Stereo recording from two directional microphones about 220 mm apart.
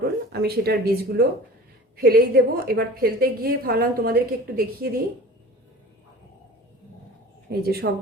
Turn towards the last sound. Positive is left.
turn(degrees=-45)  # may be behind; listen again after turning